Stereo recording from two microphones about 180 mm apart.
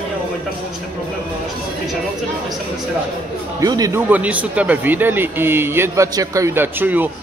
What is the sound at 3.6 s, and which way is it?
Speech, 20° right (ahead or behind).